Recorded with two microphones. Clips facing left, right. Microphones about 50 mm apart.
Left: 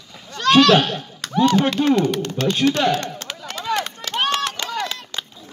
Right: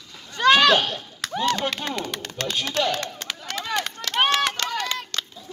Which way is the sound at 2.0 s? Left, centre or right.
Centre.